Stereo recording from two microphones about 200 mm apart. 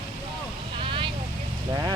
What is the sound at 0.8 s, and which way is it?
Vehicle, 25° right (ahead or behind).